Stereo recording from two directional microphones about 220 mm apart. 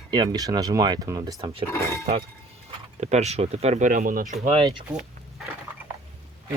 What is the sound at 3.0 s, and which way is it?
Speech, 30° right (ahead or behind).